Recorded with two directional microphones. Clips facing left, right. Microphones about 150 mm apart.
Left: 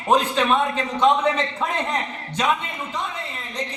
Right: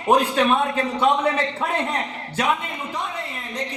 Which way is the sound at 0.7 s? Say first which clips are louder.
Left 1 dB; 10° right (ahead or behind).